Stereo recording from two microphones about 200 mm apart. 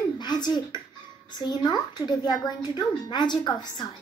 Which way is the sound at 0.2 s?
20° left (ahead or behind).